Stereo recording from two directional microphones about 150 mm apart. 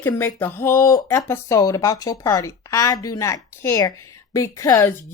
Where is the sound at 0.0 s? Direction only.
15° left (ahead or behind).